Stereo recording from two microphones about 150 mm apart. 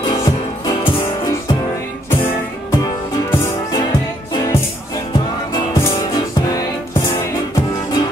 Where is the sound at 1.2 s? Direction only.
20° left (ahead or behind).